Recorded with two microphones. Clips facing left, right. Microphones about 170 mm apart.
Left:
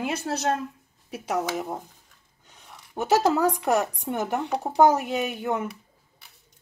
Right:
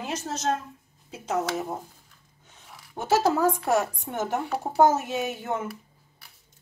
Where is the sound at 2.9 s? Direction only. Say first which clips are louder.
Left 1 dB; 15° left (ahead or behind).